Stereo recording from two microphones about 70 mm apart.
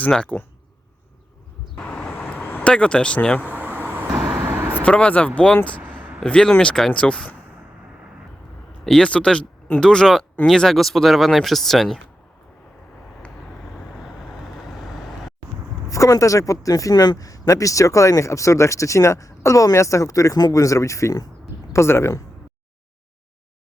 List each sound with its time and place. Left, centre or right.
0.1 s speech: centre
2.1 s vehicle: left
2.6 s speech: centre
3.4 s vehicle: right
4.1 s vehicle: centre
4.4 s vehicle: right
4.8 s speech: centre
5.8 s a sound: right
6.2 s speech: centre
8.8 s speech: centre
9.0 s speech: centre
13.7 s vehicle: centre
15.9 s speech: left
21.7 s speech: left